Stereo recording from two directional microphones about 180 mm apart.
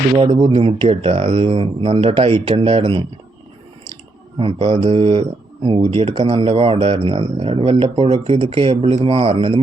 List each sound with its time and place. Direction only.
0.2 s speech: 30° right (ahead or behind)
4.4 s speech: 30° right (ahead or behind)